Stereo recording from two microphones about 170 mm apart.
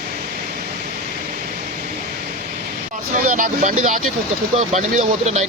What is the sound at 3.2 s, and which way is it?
Speech, 50° right (ahead or behind).